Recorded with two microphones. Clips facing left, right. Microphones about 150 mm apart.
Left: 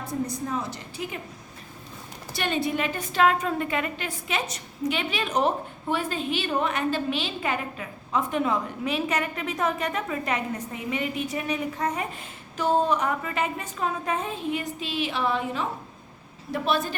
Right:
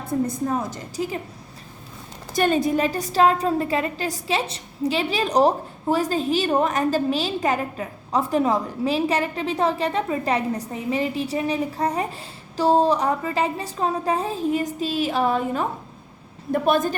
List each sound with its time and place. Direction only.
0.1 s a woman's voice: 50° right (ahead or behind)
2.3 s a woman's voice: 45° right (ahead or behind)